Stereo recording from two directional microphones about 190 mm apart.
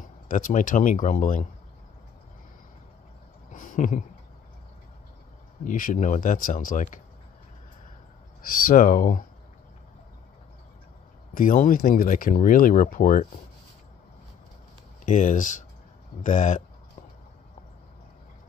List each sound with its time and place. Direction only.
0.3 s speech: 45° left (ahead or behind)
3.5 s a sound: 45° left (ahead or behind)
5.6 s speech: 45° left (ahead or behind)
8.6 s speech: 45° left (ahead or behind)
11.3 s speech: 45° left (ahead or behind)
15.0 s speech: 40° left (ahead or behind)